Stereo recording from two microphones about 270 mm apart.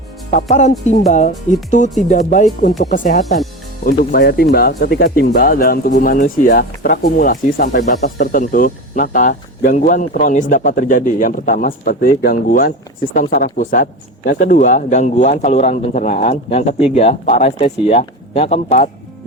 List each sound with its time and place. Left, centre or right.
0.9 s speech: left